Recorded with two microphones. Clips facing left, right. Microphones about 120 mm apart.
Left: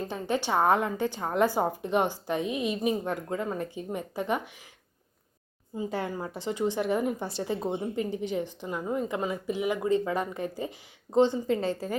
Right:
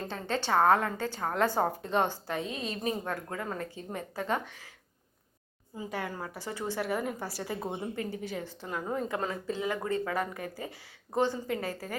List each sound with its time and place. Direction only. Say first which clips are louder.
0.1 s a woman's voice: even; 15° left (ahead or behind)
5.7 s speech: left 5 dB; 25° left (ahead or behind)